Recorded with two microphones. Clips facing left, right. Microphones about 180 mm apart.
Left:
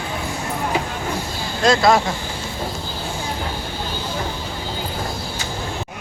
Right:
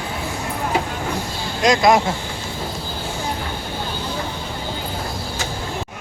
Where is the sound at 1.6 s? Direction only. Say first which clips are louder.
Even; 15° right (ahead or behind).